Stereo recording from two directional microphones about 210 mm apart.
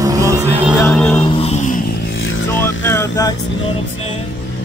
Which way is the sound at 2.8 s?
15° left (ahead or behind).